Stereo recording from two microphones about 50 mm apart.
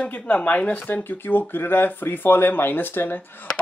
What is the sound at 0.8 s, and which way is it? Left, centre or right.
Speech, left.